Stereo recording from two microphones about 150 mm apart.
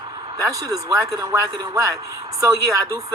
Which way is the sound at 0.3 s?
25° right (ahead or behind).